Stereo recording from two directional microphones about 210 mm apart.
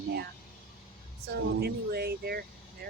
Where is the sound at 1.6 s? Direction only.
50° right (ahead or behind).